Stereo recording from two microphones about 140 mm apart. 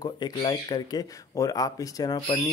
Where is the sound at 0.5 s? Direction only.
30° left (ahead or behind).